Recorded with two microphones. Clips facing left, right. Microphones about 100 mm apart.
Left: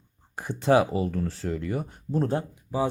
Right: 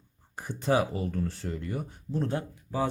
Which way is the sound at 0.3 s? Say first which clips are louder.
Left 5 dB; 85° left.